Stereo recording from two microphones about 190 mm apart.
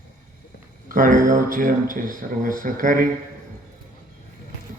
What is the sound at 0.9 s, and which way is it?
Speech, 45° right (ahead or behind).